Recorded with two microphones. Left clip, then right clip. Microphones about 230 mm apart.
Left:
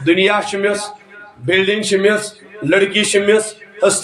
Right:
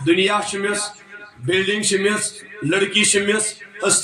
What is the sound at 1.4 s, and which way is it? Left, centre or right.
Speech, centre.